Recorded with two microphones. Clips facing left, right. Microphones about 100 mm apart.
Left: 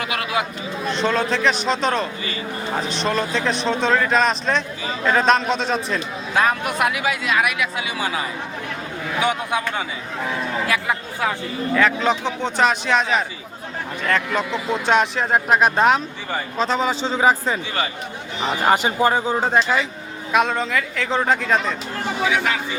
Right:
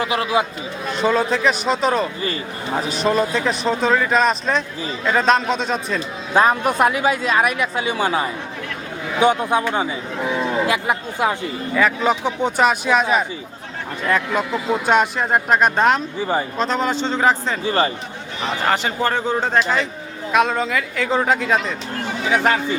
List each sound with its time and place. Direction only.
0.0 s a man's voice: 30° right (ahead or behind)
0.9 s speech: 5° right (ahead or behind)
6.3 s speech: 30° right (ahead or behind)
10.2 s speech: 15° right (ahead or behind)
11.7 s speech: 5° right (ahead or behind)
17.7 s speech: 40° right (ahead or behind)
18.4 s speech: 15° left (ahead or behind); by 21.8 s 5° right (ahead or behind)
22.3 s speech: 40° right (ahead or behind)